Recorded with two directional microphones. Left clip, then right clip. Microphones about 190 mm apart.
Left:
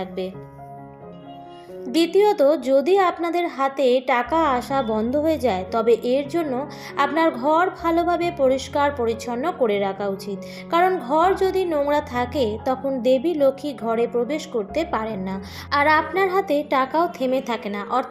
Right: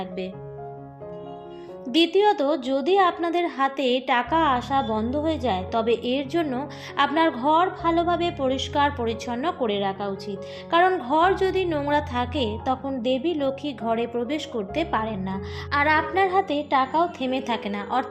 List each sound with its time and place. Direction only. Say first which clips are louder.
2.1 s a woman's voice: left 7 dB; 25° right (ahead or behind)
10.7 s a woman's voice: left 1 dB; 30° right (ahead or behind)